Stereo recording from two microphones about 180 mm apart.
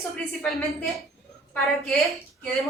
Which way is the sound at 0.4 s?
Centre (ahead or behind).